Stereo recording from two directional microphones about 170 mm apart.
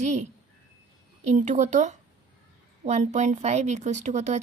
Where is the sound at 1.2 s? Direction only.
45° right (ahead or behind).